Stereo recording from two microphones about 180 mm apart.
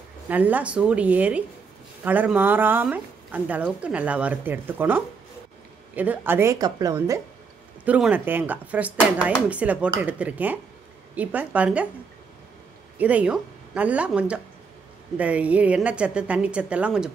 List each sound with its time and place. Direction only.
0.3 s a woman's voice: 10° right (ahead or behind)
7.8 s a woman's voice: 10° right (ahead or behind)
13.0 s a woman's voice: 10° right (ahead or behind)